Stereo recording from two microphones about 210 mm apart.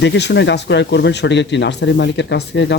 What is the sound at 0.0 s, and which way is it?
Speech, 55° left (ahead or behind).